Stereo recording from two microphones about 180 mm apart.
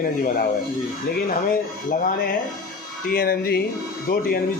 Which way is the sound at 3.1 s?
60° left (ahead or behind).